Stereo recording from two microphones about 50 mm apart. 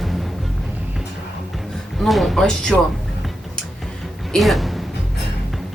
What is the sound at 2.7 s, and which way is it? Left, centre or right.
Speech, centre.